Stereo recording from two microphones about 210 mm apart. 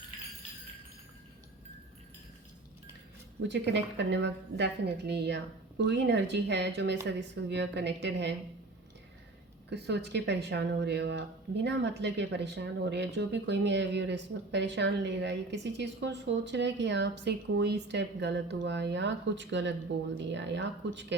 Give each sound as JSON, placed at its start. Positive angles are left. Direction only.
{"t": 3.5, "sound": "speech", "side_deg": -55}
{"t": 9.6, "sound": "speech", "side_deg": -55}